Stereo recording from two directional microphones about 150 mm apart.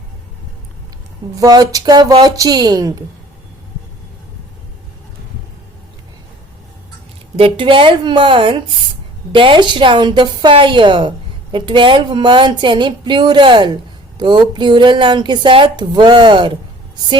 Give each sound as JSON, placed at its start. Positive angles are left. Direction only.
{"t": 1.4, "sound": "a woman's voice", "side_deg": -25}
{"t": 7.3, "sound": "speech", "side_deg": -35}